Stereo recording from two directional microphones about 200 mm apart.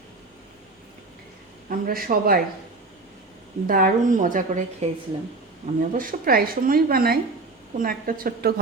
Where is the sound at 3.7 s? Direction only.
45° right (ahead or behind).